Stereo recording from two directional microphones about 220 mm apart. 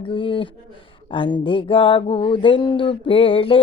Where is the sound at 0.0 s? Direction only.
25° left (ahead or behind).